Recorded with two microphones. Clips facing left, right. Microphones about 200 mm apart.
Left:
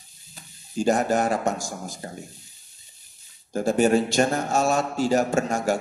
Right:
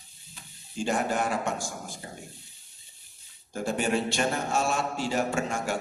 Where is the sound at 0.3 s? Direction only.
40° left (ahead or behind).